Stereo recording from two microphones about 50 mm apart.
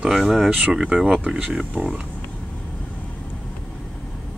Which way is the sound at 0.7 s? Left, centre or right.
Centre.